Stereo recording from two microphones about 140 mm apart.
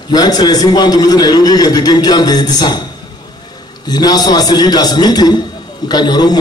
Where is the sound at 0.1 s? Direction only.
30° left (ahead or behind).